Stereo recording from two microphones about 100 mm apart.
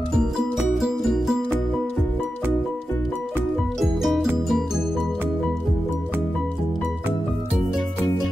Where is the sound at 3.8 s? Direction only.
Centre (ahead or behind).